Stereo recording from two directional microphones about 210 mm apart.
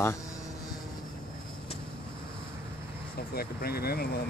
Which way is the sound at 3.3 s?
45° left (ahead or behind).